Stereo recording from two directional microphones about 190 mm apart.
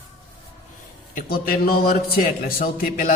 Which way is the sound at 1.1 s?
50° left (ahead or behind).